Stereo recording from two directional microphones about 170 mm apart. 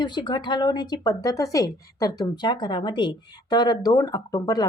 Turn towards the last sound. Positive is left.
turn(degrees=20)  # may be behind; listen again after turning